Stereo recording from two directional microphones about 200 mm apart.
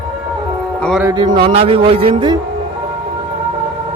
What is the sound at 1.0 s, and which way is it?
Speech, 20° right (ahead or behind).